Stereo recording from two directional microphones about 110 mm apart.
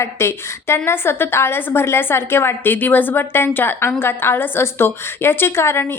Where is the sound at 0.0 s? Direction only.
25° left (ahead or behind).